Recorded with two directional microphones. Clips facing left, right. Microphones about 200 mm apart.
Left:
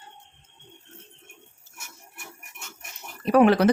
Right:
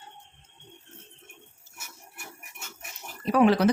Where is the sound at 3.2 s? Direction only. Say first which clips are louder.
Left 3 dB; 60° left (ahead or behind).